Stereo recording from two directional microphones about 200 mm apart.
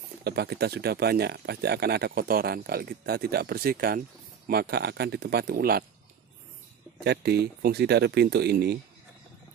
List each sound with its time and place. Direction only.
0.2 s speech: 55° right (ahead or behind)
7.1 s speech: 55° right (ahead or behind)